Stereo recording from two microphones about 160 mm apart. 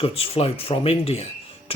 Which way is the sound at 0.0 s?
35° left (ahead or behind).